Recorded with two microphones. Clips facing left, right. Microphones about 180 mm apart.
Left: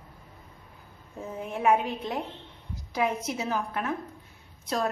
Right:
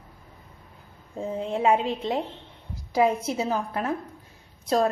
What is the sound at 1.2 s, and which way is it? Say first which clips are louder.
A woman's voice: right 4 dB; 25° right (ahead or behind).